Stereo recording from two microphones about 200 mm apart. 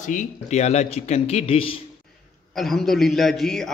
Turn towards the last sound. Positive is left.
turn(degrees=0)  # may be behind; listen again after turning